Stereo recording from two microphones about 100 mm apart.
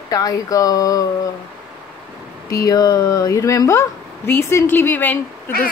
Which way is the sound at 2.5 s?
35° left (ahead or behind).